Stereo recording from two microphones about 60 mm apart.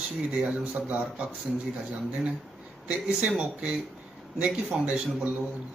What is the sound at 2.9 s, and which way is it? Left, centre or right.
Speech, centre.